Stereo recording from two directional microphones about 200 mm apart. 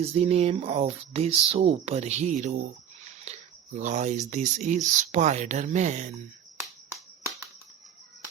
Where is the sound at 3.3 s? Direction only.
35° right (ahead or behind).